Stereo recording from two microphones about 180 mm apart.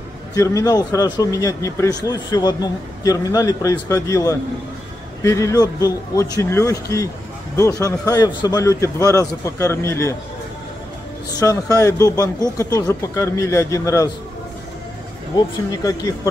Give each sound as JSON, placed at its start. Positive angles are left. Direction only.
{"t": 0.3, "sound": "a man's voice", "side_deg": 20}
{"t": 11.3, "sound": "a man's voice", "side_deg": 20}
{"t": 15.7, "sound": "speech", "side_deg": 20}